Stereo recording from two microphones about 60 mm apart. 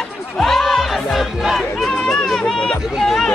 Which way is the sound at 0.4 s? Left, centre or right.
Centre.